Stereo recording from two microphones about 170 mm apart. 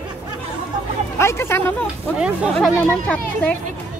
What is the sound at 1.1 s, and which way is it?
Speech, 15° left (ahead or behind).